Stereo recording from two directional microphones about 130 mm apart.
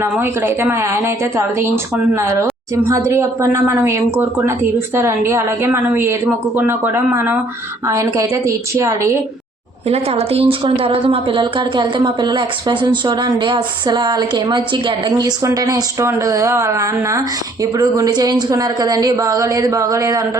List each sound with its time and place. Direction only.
0.0 s speech: 20° right (ahead or behind)
9.9 s a woman's voice: 50° right (ahead or behind); by 20.2 s 25° right (ahead or behind)